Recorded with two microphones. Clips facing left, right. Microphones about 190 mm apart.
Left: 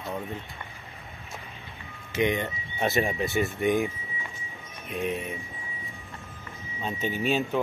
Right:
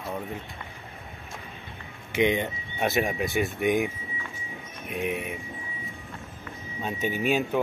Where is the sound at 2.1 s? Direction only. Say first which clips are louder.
Right 2 dB; 20° right (ahead or behind).